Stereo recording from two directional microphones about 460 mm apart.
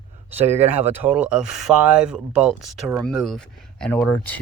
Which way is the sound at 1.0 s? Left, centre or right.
Centre.